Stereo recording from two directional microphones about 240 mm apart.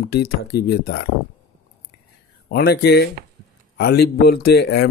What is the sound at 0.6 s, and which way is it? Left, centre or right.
Speech, left.